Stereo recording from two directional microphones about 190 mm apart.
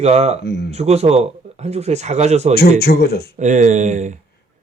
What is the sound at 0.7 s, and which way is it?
Speech, 35° right (ahead or behind).